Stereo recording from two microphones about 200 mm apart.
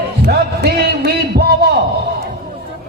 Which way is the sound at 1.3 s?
50° right (ahead or behind).